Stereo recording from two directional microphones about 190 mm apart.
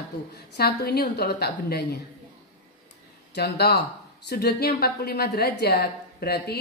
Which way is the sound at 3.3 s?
60° left (ahead or behind).